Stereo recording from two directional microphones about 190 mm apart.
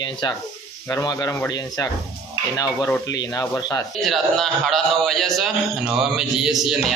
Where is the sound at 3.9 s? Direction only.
Centre (ahead or behind).